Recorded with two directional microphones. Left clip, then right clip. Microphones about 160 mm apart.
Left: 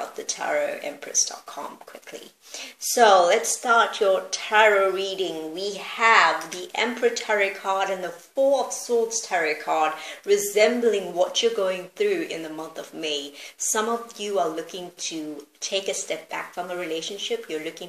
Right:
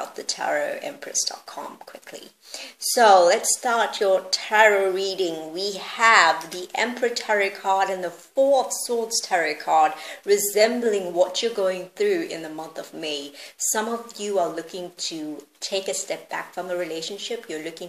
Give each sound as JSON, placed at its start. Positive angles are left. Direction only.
{"t": 0.3, "sound": "speech", "side_deg": -40}
{"t": 2.9, "sound": "speech", "side_deg": -45}
{"t": 9.2, "sound": "speech", "side_deg": -50}